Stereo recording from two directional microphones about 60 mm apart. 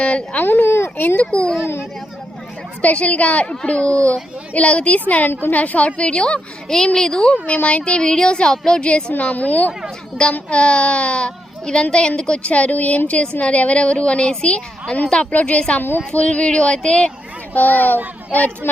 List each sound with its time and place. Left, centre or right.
0.0 s speech: left
0.4 s speech: left
1.3 s a woman's voice: centre
1.6 s speech: left
2.8 s a woman's voice: left
17.5 s a child's voice: left